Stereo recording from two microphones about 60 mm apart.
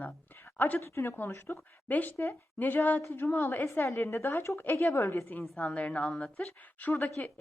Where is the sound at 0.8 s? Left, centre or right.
Left.